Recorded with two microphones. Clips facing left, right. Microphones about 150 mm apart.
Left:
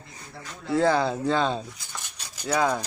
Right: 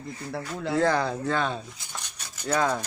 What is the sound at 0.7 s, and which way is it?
Speech, 10° left (ahead or behind).